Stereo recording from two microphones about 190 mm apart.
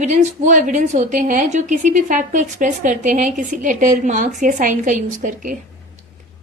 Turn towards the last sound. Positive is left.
turn(degrees=-45)  # may be behind; listen again after turning